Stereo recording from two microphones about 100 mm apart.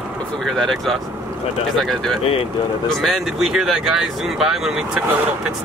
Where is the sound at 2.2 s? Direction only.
75° left (ahead or behind).